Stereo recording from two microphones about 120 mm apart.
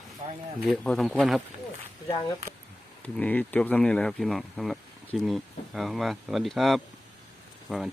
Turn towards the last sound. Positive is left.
turn(degrees=0)  # may be behind; listen again after turning